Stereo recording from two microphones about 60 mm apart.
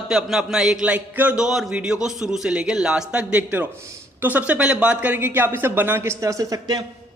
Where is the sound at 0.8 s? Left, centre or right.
Right.